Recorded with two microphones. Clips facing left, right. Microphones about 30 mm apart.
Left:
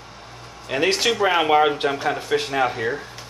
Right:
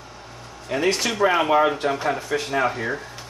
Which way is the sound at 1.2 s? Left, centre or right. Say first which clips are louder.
Even; centre.